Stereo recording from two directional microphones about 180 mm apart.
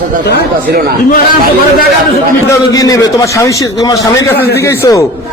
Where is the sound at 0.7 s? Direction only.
55° right (ahead or behind).